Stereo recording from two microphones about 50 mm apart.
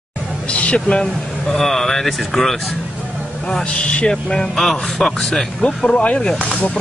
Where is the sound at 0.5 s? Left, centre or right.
Left.